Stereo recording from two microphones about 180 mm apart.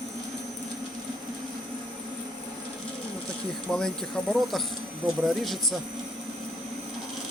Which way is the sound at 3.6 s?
5° left (ahead or behind).